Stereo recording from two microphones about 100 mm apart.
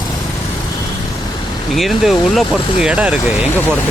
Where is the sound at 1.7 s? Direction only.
Centre (ahead or behind).